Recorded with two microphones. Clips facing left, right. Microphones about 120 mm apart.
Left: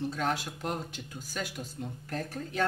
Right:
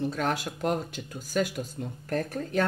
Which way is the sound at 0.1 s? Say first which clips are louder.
Right 3 dB; 55° right (ahead or behind).